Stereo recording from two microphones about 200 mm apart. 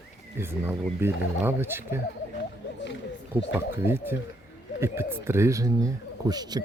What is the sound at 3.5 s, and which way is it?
Speech, 10° right (ahead or behind).